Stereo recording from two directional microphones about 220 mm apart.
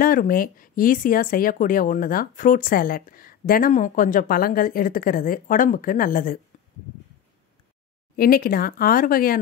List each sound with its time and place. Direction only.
0.0 s speech: 40° left (ahead or behind)
8.2 s speech: 40° left (ahead or behind)